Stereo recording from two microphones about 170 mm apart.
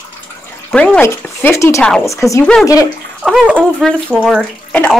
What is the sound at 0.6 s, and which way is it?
Speech, 5° left (ahead or behind).